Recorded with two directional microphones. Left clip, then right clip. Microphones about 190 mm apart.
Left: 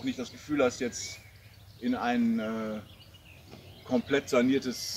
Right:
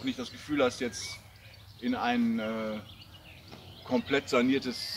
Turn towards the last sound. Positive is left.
turn(degrees=60)  # may be behind; listen again after turning